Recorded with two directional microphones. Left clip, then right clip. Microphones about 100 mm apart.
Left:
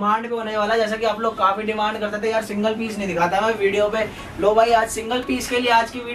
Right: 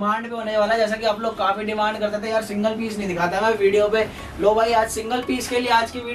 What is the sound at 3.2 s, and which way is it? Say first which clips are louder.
Speech: even; 15° right (ahead or behind).